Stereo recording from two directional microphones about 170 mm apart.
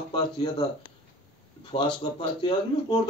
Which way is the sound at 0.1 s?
25° left (ahead or behind).